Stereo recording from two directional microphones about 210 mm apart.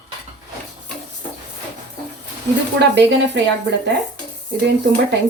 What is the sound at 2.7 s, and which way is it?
Speech, 55° right (ahead or behind).